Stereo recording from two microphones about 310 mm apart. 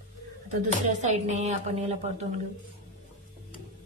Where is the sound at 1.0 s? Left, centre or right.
Right.